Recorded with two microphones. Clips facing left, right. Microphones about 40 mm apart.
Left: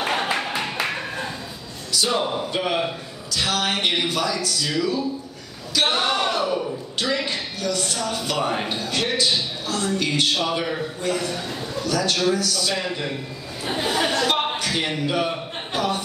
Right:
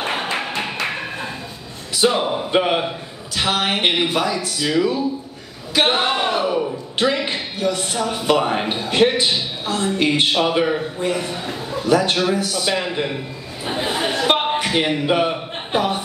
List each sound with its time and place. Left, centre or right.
0.0 s a sound: centre
1.9 s speech: right
2.5 s a man's voice: right
13.9 s a sound: centre
14.2 s chuckle: right
14.9 s speech: right